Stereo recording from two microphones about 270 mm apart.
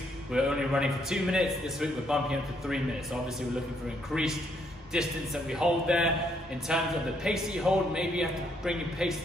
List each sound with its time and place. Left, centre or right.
0.3 s a man's voice: centre
4.1 s a man's voice: centre